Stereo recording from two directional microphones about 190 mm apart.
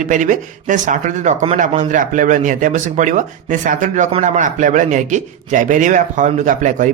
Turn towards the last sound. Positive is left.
turn(degrees=-40)  # may be behind; listen again after turning